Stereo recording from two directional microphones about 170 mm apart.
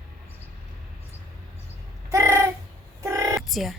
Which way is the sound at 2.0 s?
15° right (ahead or behind).